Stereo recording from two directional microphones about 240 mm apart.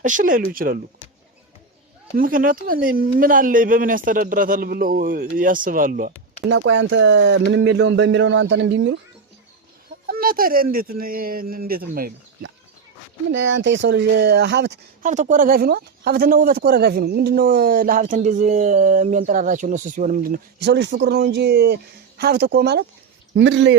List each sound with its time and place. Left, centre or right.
0.0 s speech: right
2.1 s speech: right
6.5 s speech: right
10.1 s speech: right
13.3 s speech: right
15.0 s speech: right